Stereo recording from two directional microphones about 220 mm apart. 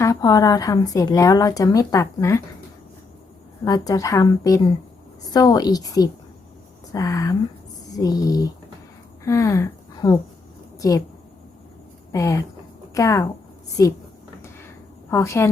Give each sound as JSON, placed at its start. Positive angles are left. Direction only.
{"t": 0.0, "sound": "speech", "side_deg": 15}
{"t": 3.6, "sound": "a woman's voice", "side_deg": 15}
{"t": 12.1, "sound": "speech", "side_deg": 15}
{"t": 15.1, "sound": "speech", "side_deg": 15}